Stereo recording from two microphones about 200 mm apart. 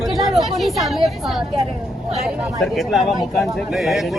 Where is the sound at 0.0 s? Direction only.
Centre (ahead or behind).